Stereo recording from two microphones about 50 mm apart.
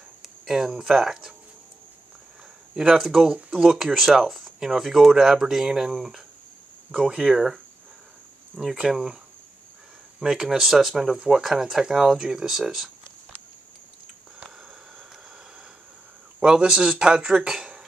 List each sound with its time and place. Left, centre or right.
0.2 s speech: centre
2.9 s speech: centre
3.3 s speech: right
3.6 s speech: centre
7.1 s speech: centre
8.6 s speech: centre
10.2 s speech: centre
10.7 s speech: centre
11.0 s speech: centre
16.3 s speech: centre